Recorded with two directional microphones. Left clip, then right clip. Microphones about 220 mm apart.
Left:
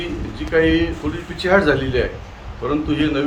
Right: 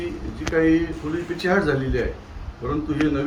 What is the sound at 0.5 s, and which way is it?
A man's voice, 30° left (ahead or behind).